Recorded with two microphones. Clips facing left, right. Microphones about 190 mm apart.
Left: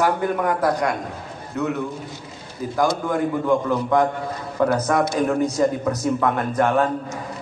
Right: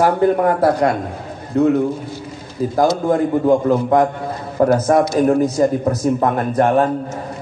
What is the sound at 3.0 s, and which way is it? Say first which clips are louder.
A man's voice: right 6 dB; 30° right (ahead or behind).